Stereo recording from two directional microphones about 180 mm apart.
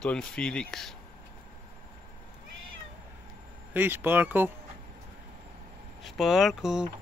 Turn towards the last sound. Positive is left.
turn(degrees=-5)  # may be behind; listen again after turning